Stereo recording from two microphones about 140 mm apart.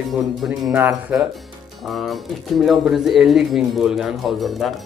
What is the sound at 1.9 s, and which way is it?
Speech, centre (ahead or behind).